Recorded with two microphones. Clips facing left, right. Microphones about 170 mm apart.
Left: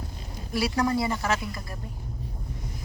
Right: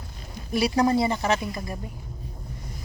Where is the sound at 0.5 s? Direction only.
20° right (ahead or behind).